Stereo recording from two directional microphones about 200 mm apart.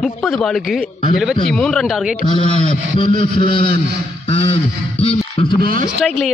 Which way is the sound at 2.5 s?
35° right (ahead or behind).